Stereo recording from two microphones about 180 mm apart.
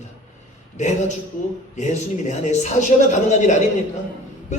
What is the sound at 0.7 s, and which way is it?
Speech, 40° left (ahead or behind).